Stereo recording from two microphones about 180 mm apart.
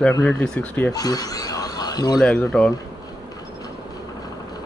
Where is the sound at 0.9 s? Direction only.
20° left (ahead or behind).